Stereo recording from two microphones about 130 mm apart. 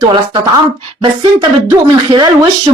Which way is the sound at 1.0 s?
35° right (ahead or behind).